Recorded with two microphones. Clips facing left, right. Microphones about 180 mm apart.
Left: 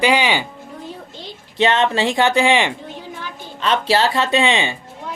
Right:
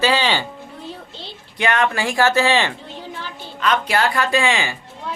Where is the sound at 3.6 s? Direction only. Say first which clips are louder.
Left 2 dB; 30° left (ahead or behind).